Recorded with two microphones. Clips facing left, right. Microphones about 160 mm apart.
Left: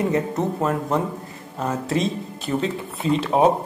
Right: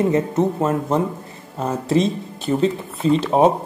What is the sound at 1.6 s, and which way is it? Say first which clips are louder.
Speech: right 4 dB; centre (ahead or behind).